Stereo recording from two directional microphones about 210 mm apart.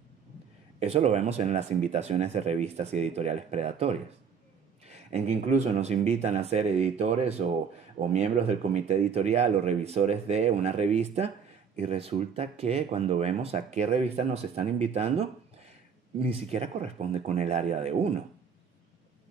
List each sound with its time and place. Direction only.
0.7 s speech: 30° right (ahead or behind)